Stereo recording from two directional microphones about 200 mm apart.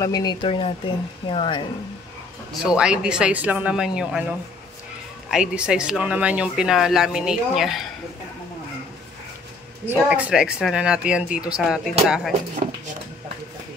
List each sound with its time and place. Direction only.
0.0 s speech: 20° left (ahead or behind)
2.6 s speech: 5° right (ahead or behind)
9.8 s speech: 5° right (ahead or behind)